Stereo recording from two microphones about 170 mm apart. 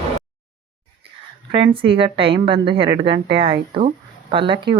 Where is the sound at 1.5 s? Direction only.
30° right (ahead or behind).